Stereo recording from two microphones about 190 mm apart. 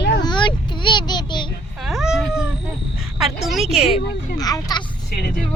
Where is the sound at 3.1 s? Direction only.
Centre (ahead or behind).